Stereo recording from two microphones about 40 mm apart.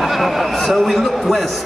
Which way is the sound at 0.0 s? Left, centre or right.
Centre.